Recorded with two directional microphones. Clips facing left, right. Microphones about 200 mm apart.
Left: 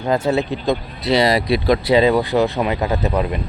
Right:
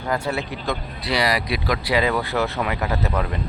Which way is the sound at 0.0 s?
25° left (ahead or behind).